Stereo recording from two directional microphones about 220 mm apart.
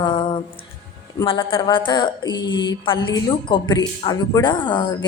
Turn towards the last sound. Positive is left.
turn(degrees=20)  # may be behind; listen again after turning